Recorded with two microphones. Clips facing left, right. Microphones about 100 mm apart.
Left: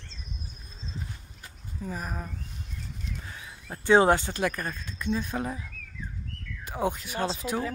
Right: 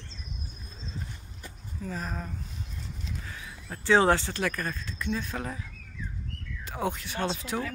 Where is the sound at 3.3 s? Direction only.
25° left (ahead or behind).